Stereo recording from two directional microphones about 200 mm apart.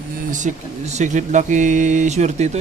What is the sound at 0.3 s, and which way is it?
Speech, 40° right (ahead or behind).